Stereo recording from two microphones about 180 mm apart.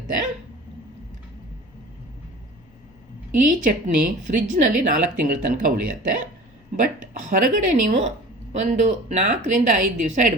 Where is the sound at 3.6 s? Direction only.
45° right (ahead or behind).